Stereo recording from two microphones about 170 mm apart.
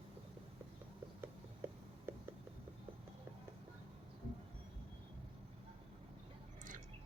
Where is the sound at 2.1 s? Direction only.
15° right (ahead or behind).